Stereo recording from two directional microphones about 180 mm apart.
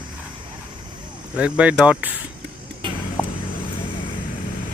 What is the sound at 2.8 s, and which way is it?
Vehicle, 25° right (ahead or behind).